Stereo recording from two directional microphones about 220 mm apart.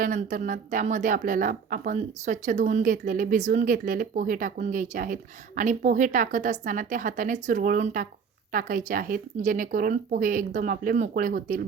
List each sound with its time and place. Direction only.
0.0 s speech: 35° right (ahead or behind)